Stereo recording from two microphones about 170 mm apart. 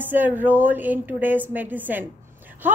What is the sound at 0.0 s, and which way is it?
Speech, 10° right (ahead or behind).